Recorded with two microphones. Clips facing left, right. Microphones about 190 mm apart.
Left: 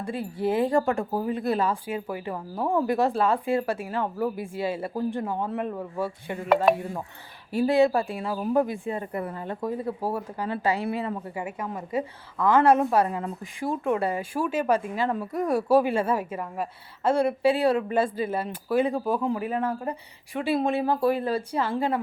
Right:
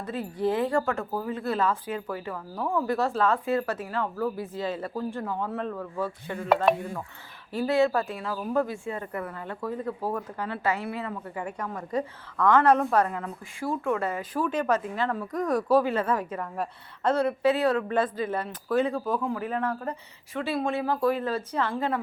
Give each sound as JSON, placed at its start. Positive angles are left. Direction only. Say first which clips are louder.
{"t": 0.0, "sound": "speech", "louder": "even", "side_deg": 10}
{"t": 7.5, "sound": "speech", "louder": "left 3 dB", "side_deg": 15}
{"t": 11.9, "sound": "speech", "louder": "right 1 dB", "side_deg": 5}
{"t": 13.1, "sound": "speech", "louder": "left 3 dB", "side_deg": 20}